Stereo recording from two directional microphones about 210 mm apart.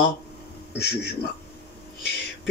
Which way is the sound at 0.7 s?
50° left (ahead or behind).